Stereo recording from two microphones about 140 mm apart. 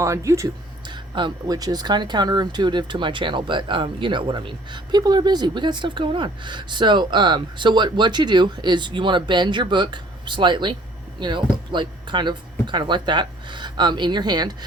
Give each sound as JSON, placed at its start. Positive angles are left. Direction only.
{"t": 0.0, "sound": "speech", "side_deg": -20}
{"t": 0.9, "sound": "speech", "side_deg": -35}